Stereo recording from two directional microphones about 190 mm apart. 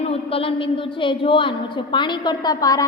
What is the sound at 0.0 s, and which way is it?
A woman's voice, 30° left (ahead or behind).